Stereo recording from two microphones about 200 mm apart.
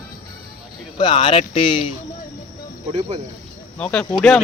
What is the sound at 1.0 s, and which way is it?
Speech, 25° left (ahead or behind).